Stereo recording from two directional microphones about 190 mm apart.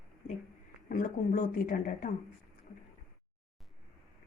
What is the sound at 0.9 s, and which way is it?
Speech, 45° left (ahead or behind).